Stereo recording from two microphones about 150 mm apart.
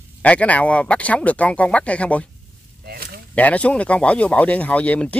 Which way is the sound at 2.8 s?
90° right.